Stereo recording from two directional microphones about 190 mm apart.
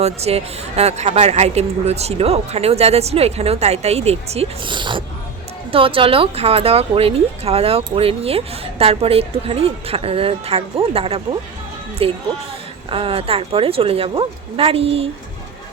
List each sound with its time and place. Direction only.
0.0 s speech: 35° right (ahead or behind)